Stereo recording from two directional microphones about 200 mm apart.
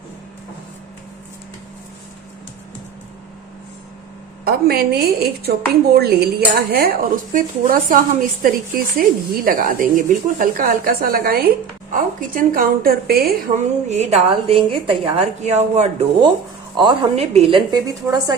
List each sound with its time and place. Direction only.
4.4 s speech: 50° right (ahead or behind); by 16.0 s 35° right (ahead or behind)
16.7 s a woman's voice: 25° right (ahead or behind)